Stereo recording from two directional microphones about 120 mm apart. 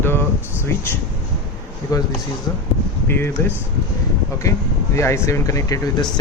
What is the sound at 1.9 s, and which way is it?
Speech, 30° left (ahead or behind).